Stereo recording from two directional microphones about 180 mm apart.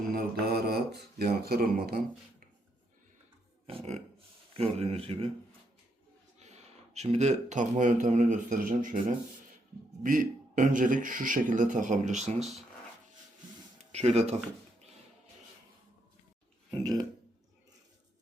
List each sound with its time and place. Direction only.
0.1 s mantra: 55° right (ahead or behind)
3.7 s speech: 35° right (ahead or behind)
6.4 s a man's voice: 40° right (ahead or behind)
13.9 s speech: 35° right (ahead or behind)
16.8 s speech: 20° right (ahead or behind)